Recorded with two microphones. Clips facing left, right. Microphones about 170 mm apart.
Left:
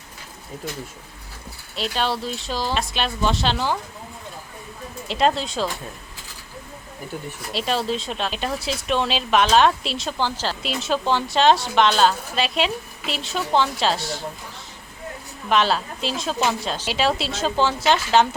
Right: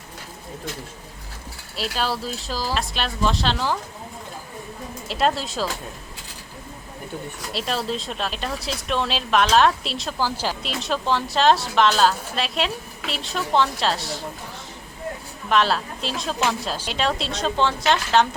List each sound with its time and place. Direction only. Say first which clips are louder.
1.7 s a woman's voice: left 1 dB; 5° right (ahead or behind)
5.0 s a woman's voice: left 2 dB; centre (ahead or behind)
7.5 s a woman's voice: left 3 dB; centre (ahead or behind)
10.6 s a woman's voice: left 2 dB; centre (ahead or behind)
15.4 s a woman's voice: even; centre (ahead or behind)